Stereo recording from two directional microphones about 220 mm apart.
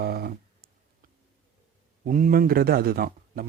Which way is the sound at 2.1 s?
40° right (ahead or behind).